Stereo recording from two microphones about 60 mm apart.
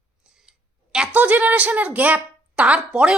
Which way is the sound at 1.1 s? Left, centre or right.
Right.